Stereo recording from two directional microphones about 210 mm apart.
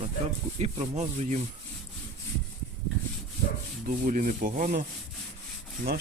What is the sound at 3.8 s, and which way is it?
Rub, 40° right (ahead or behind).